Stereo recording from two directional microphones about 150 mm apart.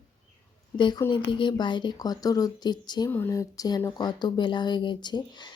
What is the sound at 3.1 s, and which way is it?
Speech, 15° left (ahead or behind).